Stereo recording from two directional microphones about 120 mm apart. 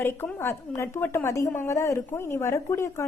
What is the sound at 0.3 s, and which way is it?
Speech, 20° left (ahead or behind).